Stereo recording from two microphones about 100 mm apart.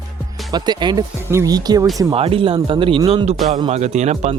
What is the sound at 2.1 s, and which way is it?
Speech, 70° right (ahead or behind).